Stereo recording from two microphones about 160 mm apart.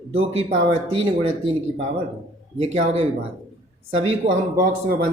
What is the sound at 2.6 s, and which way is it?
Speech, 40° right (ahead or behind).